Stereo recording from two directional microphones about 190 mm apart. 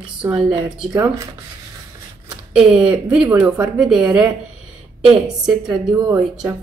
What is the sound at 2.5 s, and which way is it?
A woman's voice, 5° right (ahead or behind).